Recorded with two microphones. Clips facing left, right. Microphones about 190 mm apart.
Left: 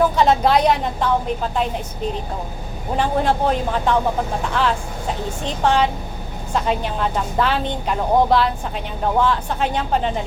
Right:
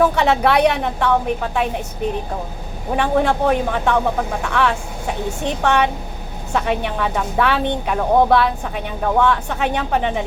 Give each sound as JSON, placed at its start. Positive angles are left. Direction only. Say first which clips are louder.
{"t": 0.0, "sound": "a woman's voice", "louder": "even", "side_deg": -70}
{"t": 2.9, "sound": "a woman's voice", "louder": "right 2 dB", "side_deg": -65}